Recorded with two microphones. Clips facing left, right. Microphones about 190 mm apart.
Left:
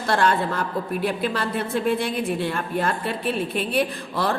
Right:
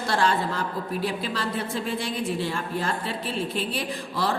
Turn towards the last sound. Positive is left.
turn(degrees=55)  # may be behind; listen again after turning